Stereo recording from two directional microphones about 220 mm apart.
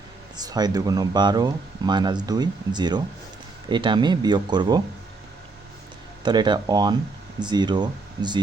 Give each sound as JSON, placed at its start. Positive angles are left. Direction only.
{"t": 0.3, "sound": "speech", "side_deg": -15}
{"t": 6.2, "sound": "speech", "side_deg": -20}